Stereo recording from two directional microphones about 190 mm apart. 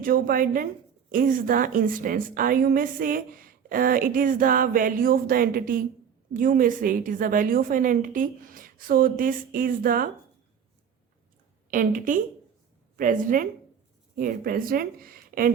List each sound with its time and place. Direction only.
0.0 s a woman's voice: 50° right (ahead or behind)
11.7 s a woman's voice: 45° right (ahead or behind)